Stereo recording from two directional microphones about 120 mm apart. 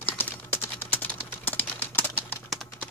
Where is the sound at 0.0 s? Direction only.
20° left (ahead or behind).